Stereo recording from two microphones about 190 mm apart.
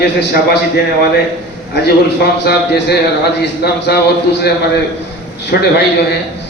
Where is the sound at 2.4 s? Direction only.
60° left (ahead or behind).